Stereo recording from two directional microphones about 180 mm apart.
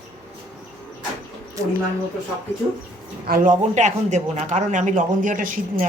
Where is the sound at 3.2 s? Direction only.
50° right (ahead or behind).